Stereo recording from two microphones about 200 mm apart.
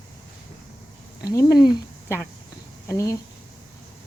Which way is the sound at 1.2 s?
15° left (ahead or behind).